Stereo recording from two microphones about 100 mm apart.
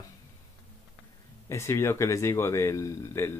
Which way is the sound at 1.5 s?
30° left (ahead or behind).